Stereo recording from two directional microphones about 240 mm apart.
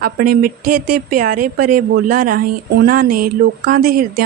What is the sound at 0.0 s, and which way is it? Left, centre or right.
Speech, right.